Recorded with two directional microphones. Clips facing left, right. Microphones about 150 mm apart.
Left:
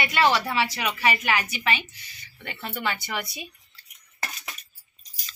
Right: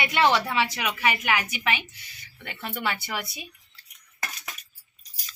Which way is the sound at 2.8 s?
10° right (ahead or behind).